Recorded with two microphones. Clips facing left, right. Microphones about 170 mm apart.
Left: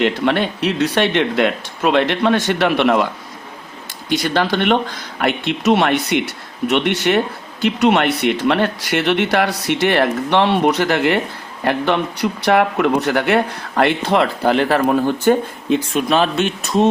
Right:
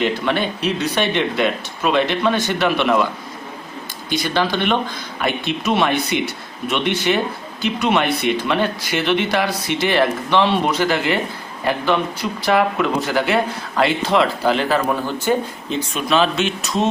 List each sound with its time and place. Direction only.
0.0 s speech: 75° left (ahead or behind)
4.1 s speech: 70° left (ahead or behind); by 16.7 s 50° left (ahead or behind)